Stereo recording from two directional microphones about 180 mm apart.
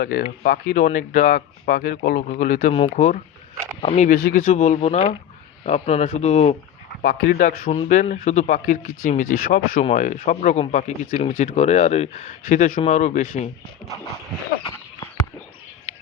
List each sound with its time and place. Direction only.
0.0 s speech: 60° left (ahead or behind); by 2.7 s 45° left (ahead or behind)
2.7 s speech: 30° left (ahead or behind)
7.0 s speech: 65° left (ahead or behind)
7.3 s speech: 45° left (ahead or behind)